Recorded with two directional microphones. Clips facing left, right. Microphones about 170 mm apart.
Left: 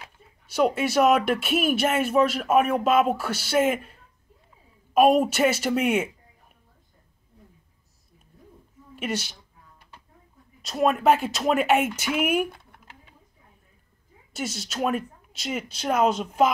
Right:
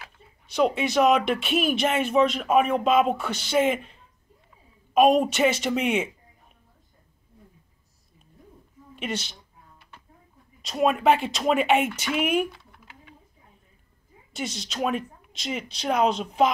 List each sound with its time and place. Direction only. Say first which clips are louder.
0.5 s speech: even; 5° left (ahead or behind)
8.9 s a woman's voice: left 2 dB; 5° left (ahead or behind)
10.6 s speech: even; centre (ahead or behind)
12.4 s typing: even; 55° left (ahead or behind)
14.3 s speech: left 1 dB; 5° left (ahead or behind)